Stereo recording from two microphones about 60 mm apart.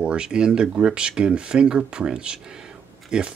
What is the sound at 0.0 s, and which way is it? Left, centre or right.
Speech, centre.